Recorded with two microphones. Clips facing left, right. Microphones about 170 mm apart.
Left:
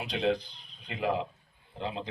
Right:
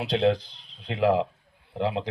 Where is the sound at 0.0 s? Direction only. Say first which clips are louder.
Right 6 dB; 90° right.